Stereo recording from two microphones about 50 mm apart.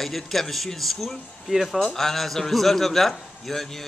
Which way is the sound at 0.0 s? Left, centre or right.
Centre.